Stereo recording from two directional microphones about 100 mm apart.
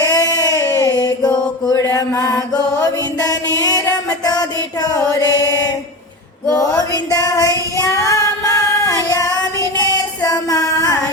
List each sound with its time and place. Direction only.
0.0 s a sound: 35° left (ahead or behind)
1.7 s mantra: 25° left (ahead or behind)
2.7 s music: 35° left (ahead or behind)
7.8 s child singing: 35° left (ahead or behind)
10.2 s music: 35° left (ahead or behind)